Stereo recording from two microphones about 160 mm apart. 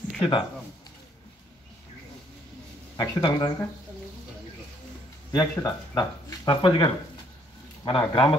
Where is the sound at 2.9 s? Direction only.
25° left (ahead or behind).